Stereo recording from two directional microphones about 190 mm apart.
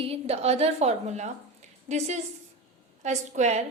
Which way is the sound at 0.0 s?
30° right (ahead or behind).